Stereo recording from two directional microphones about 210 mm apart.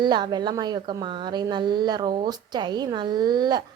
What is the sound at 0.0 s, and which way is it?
A woman's voice, 20° right (ahead or behind).